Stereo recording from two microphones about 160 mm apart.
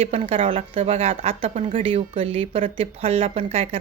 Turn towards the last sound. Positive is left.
turn(degrees=-40)  # may be behind; listen again after turning